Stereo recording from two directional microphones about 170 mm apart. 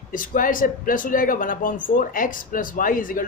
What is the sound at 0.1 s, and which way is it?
A man's voice, 50° left (ahead or behind).